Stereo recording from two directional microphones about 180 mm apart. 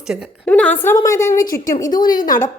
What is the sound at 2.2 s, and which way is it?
Speech, 45° left (ahead or behind).